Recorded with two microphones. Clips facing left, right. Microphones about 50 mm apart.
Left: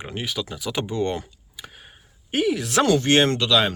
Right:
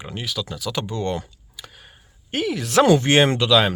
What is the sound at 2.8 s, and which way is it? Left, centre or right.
Speech, centre.